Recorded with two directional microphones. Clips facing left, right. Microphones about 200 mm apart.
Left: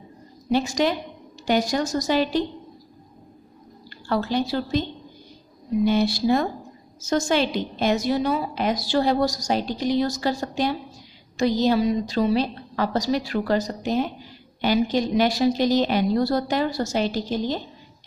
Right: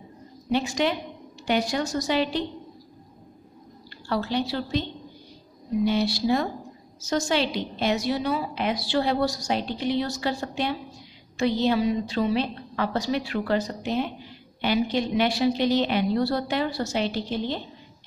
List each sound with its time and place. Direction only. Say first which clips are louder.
0.5 s a woman's voice: left 3 dB; 40° left (ahead or behind)
4.1 s a woman's voice: left 3 dB; 45° left (ahead or behind)
5.9 s a woman's voice: left 3 dB; 50° left (ahead or behind)